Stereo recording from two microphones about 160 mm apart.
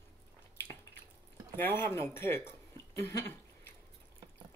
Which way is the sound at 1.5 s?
15° left (ahead or behind).